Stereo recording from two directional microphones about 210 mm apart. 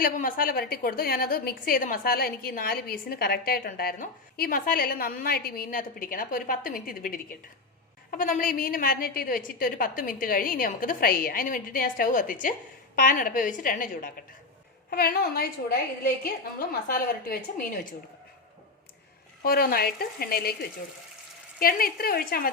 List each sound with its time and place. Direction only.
0.0 s a woman's voice: 40° left (ahead or behind)
19.4 s a woman's voice: 45° left (ahead or behind)